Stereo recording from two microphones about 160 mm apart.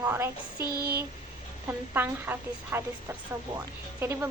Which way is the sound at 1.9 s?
15° right (ahead or behind).